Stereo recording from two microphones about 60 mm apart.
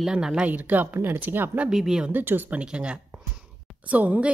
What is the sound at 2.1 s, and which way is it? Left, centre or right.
Speech, right.